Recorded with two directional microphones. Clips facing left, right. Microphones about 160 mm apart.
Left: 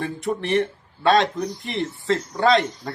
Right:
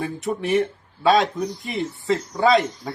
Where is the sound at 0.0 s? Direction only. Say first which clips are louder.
Even; centre (ahead or behind).